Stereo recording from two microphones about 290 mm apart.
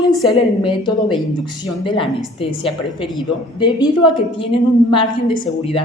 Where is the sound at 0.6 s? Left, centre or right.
Centre.